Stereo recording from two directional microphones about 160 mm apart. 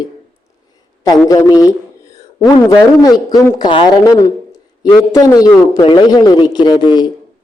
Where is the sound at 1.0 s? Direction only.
20° left (ahead or behind).